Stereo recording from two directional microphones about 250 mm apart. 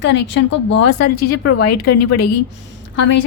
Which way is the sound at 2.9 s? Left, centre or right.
Left.